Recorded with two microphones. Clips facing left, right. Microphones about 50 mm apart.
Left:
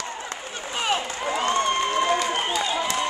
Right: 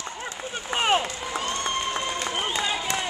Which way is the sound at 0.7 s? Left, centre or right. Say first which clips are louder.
Right 3 dB; right.